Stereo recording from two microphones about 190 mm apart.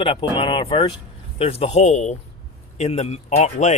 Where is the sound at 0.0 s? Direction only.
30° left (ahead or behind).